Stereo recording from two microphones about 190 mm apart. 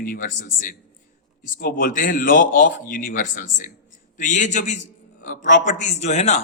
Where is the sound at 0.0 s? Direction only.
45° left (ahead or behind).